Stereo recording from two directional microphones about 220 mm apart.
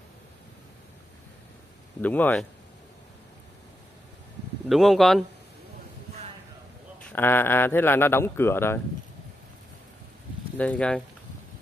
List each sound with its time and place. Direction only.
2.0 s a man's voice: 10° left (ahead or behind)
4.6 s speech: centre (ahead or behind)
7.1 s a man's voice: 10° left (ahead or behind)
10.6 s speech: 5° left (ahead or behind)